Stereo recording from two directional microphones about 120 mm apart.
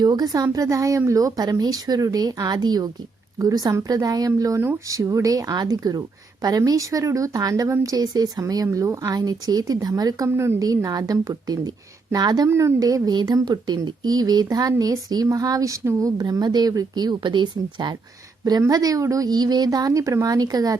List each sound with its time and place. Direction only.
0.0 s speech: 35° right (ahead or behind)